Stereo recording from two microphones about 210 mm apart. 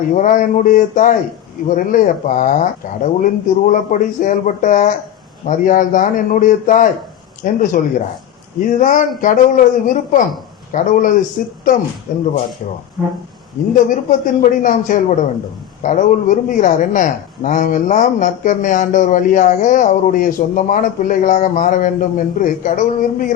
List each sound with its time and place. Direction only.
0.1 s speech: 40° left (ahead or behind)
13.7 s speech: 40° left (ahead or behind)